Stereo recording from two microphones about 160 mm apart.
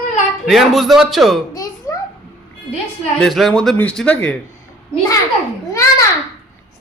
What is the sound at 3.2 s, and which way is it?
A man's voice, centre (ahead or behind).